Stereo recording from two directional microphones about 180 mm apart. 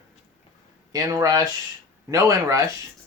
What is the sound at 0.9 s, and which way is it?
Speech, 20° right (ahead or behind).